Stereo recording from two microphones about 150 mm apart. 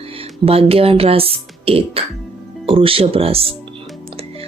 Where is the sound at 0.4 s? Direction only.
40° right (ahead or behind).